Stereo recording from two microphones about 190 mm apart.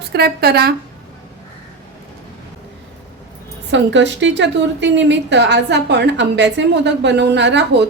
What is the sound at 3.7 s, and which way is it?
A woman's voice, 70° right (ahead or behind).